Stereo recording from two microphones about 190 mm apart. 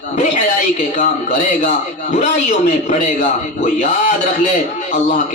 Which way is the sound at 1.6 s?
40° left (ahead or behind).